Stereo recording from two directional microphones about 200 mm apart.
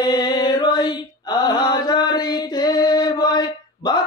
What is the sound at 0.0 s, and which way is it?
Mantra, 20° left (ahead or behind).